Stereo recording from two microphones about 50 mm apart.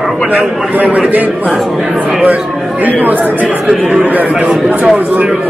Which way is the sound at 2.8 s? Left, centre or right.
Right.